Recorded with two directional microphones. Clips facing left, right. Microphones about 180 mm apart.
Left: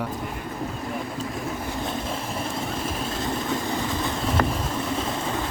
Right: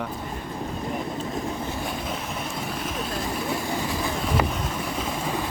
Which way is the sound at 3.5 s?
20° left (ahead or behind).